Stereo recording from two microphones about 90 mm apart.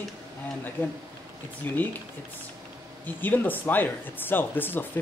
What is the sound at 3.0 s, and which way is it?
Speech, 20° left (ahead or behind).